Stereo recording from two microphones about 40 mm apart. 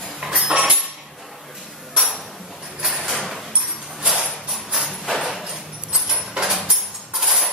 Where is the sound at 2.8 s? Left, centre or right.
Centre.